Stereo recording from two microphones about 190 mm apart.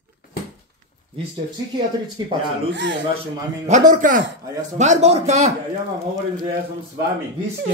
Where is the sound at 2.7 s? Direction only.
70° right (ahead or behind).